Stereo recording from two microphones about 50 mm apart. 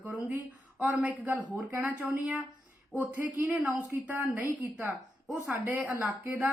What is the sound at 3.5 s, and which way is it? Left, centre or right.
A woman's voice, right.